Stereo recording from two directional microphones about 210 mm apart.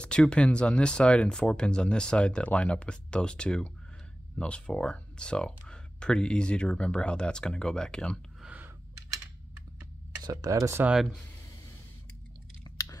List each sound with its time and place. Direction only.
0.0 s speech: 5° left (ahead or behind)
10.2 s speech: 15° right (ahead or behind)
12.6 s chewing: 20° left (ahead or behind)